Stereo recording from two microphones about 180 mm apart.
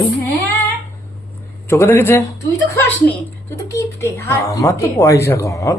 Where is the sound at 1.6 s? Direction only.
15° left (ahead or behind).